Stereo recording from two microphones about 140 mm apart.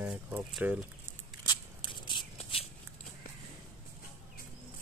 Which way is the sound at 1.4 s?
35° left (ahead or behind).